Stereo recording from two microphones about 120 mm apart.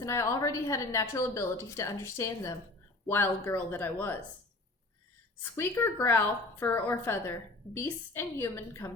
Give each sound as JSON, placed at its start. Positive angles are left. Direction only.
{"t": 0.0, "sound": "a woman's voice", "side_deg": 25}
{"t": 5.4, "sound": "a woman's voice", "side_deg": 20}